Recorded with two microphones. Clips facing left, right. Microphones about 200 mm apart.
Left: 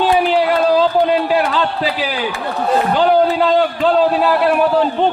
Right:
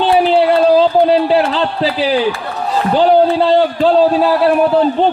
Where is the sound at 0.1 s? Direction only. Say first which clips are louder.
Right 3 dB; 30° right (ahead or behind).